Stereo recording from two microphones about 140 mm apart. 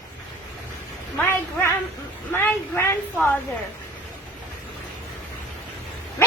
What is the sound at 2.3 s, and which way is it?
A woman's voice, 15° left (ahead or behind).